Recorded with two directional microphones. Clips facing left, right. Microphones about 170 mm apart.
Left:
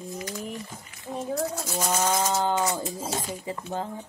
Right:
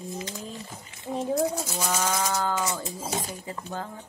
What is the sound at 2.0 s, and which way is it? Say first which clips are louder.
A woman's voice: left 3 dB; 15° left (ahead or behind).